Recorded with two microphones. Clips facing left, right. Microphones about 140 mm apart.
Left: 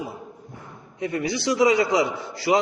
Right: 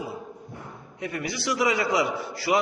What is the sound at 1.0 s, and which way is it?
A man's voice, 25° left (ahead or behind).